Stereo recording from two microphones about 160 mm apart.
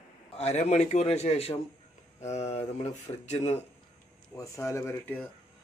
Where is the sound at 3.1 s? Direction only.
30° left (ahead or behind).